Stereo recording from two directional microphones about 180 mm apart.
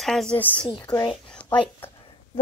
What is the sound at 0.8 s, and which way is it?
Speech, 20° left (ahead or behind).